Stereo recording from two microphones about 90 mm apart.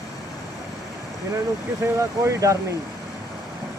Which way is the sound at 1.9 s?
35° right (ahead or behind).